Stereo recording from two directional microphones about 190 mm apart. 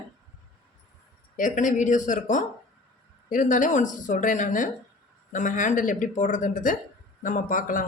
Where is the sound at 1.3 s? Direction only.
45° left (ahead or behind).